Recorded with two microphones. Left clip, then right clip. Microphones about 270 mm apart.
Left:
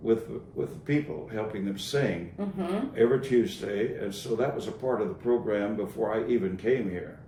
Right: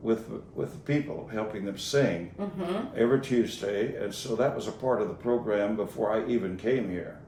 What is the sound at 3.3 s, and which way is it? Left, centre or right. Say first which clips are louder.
Speech: left 1 dB; centre.